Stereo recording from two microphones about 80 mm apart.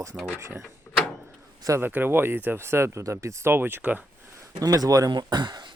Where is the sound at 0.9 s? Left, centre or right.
Centre.